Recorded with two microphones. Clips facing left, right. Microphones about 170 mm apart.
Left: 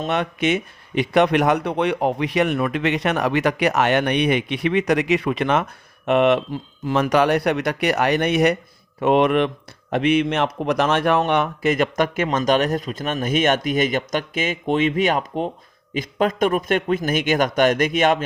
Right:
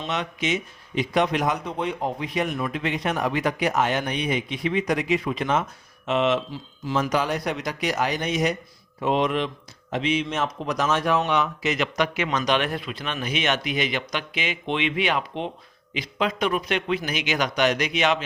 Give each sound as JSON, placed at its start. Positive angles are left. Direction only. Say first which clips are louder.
{"t": 0.0, "sound": "a man's voice", "louder": "left 6 dB", "side_deg": 60}